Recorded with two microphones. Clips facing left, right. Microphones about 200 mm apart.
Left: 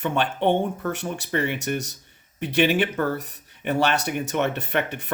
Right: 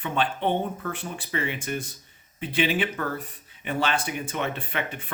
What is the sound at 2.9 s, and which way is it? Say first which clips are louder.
Speech: left 6 dB; 40° left (ahead or behind).